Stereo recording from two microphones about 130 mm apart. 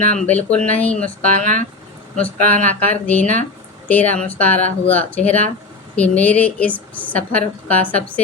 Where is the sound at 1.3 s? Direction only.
80° right.